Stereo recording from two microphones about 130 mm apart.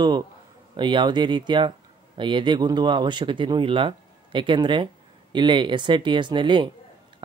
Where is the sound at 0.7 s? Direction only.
35° right (ahead or behind).